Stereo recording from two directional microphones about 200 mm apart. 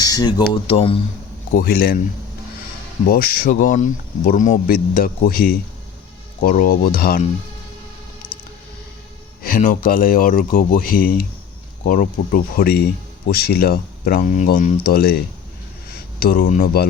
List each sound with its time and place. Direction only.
0.0 s speech: 20° left (ahead or behind)
1.5 s speech: 45° left (ahead or behind)
3.1 s speech: 45° left (ahead or behind)
9.4 s speech: 40° left (ahead or behind)